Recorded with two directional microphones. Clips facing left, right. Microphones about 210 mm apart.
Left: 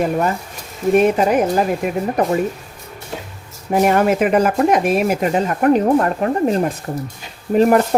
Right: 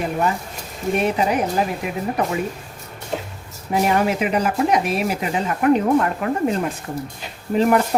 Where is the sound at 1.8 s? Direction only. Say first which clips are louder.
Left 4 dB; 45° left (ahead or behind).